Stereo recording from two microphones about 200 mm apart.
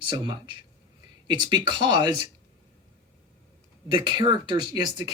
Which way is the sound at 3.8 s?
25° right (ahead or behind).